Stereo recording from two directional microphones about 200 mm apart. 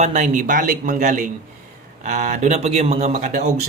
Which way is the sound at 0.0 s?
35° right (ahead or behind).